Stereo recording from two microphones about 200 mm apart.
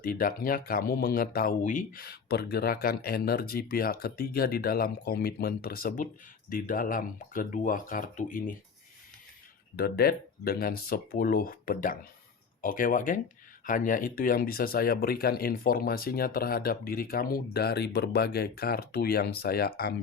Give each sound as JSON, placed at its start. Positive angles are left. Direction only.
{"t": 0.0, "sound": "speech", "side_deg": 45}
{"t": 9.7, "sound": "speech", "side_deg": 50}